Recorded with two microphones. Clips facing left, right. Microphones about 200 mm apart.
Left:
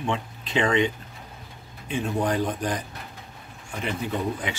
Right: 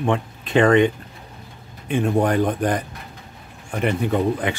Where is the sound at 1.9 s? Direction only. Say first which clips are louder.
Right 6 dB; 60° right (ahead or behind).